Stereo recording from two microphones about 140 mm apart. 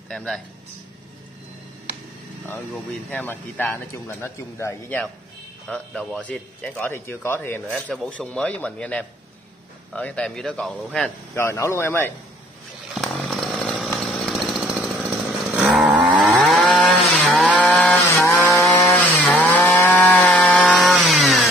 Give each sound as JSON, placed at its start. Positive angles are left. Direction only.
{"t": 0.1, "sound": "speech", "side_deg": 5}
{"t": 3.1, "sound": "speech", "side_deg": 15}
{"t": 5.7, "sound": "speech", "side_deg": 5}
{"t": 7.9, "sound": "speech", "side_deg": 5}
{"t": 11.3, "sound": "speech", "side_deg": 20}
{"t": 12.9, "sound": "chainsaw", "side_deg": -5}